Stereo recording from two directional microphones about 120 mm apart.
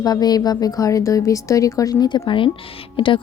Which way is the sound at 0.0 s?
35° left (ahead or behind).